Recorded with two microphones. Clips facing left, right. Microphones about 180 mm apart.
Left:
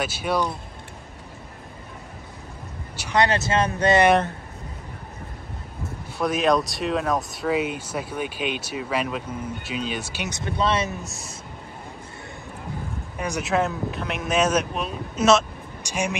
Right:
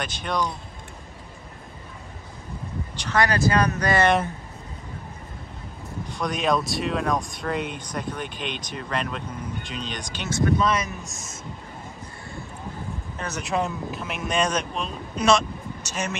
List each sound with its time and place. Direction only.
0.0 s speech: 5° left (ahead or behind)
3.2 s speech: 25° left (ahead or behind)
6.1 s speech: centre (ahead or behind)
10.3 s speech: 25° left (ahead or behind)
13.4 s speech: centre (ahead or behind)